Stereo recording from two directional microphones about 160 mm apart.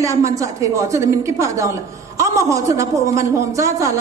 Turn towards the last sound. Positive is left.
turn(degrees=-20)  # may be behind; listen again after turning